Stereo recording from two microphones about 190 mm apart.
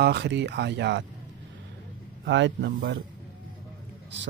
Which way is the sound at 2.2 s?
70° right (ahead or behind).